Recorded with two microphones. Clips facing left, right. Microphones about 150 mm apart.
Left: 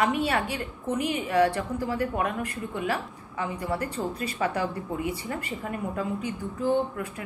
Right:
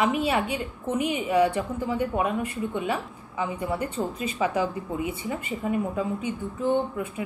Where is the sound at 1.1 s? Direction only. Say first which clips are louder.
Right 1 dB; 10° right (ahead or behind).